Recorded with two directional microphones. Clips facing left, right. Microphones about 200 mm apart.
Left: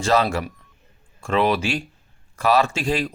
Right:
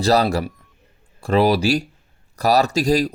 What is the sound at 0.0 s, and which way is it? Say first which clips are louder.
A man's voice: right 3 dB; 35° right (ahead or behind).